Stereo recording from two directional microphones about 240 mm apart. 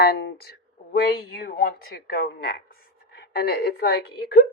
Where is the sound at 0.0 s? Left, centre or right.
Left.